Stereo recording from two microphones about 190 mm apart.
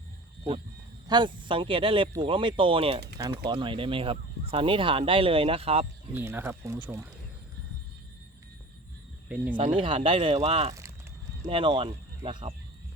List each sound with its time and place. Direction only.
1.0 s speech: 25° right (ahead or behind)
6.1 s speech: 10° right (ahead or behind)
9.6 s speech: 25° right (ahead or behind)